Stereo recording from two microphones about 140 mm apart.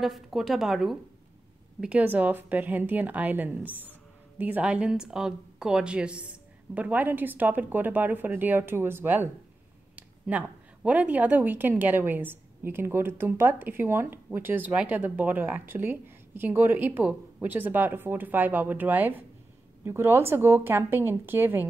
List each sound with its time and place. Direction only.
0.0 s a woman's voice: centre (ahead or behind)